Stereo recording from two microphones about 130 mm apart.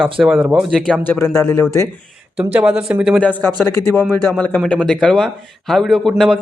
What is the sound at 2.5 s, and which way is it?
Speech, 10° right (ahead or behind).